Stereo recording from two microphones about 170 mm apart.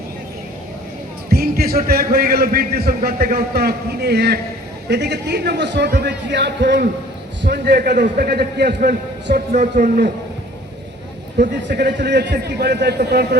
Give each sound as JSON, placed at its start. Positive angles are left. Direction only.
{"t": 1.3, "sound": "a man's voice", "side_deg": -65}
{"t": 7.4, "sound": "a man's voice", "side_deg": -75}
{"t": 8.0, "sound": "a man's voice", "side_deg": -50}
{"t": 8.3, "sound": "a man's voice", "side_deg": -75}
{"t": 9.5, "sound": "a man's voice", "side_deg": -50}
{"t": 11.5, "sound": "a man's voice", "side_deg": -75}
{"t": 12.0, "sound": "a man's voice", "side_deg": -85}